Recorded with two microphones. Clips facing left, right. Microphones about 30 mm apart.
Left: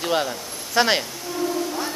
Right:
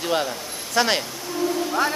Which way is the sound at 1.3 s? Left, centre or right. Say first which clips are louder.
Right 1 dB; centre.